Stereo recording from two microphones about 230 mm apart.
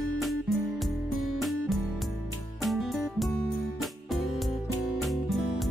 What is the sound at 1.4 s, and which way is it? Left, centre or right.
Music, centre.